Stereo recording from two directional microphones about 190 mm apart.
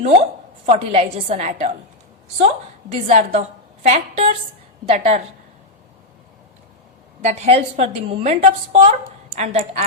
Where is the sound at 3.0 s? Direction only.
35° right (ahead or behind).